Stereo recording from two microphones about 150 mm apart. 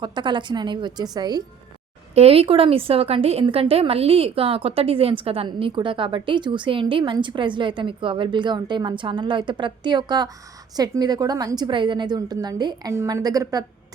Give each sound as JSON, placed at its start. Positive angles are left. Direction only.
{"t": 0.0, "sound": "a woman's voice", "side_deg": -30}
{"t": 2.1, "sound": "a woman's voice", "side_deg": -40}